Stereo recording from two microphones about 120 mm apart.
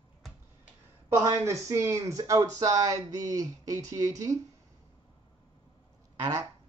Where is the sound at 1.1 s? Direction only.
25° right (ahead or behind).